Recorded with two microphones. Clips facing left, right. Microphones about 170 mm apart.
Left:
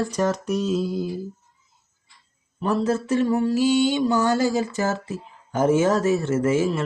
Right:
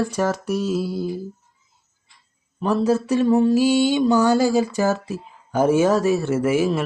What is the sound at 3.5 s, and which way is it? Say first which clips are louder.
Speech: right 2 dB; 15° right (ahead or behind).